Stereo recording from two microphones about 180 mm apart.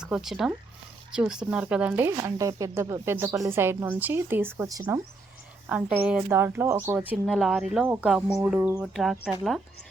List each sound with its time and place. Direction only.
0.0 s speech: centre (ahead or behind)